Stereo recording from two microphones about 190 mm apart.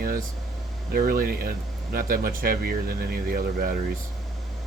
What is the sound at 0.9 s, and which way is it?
Speech, 50° right (ahead or behind).